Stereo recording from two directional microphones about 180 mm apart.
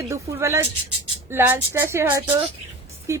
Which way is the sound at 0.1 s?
15° right (ahead or behind).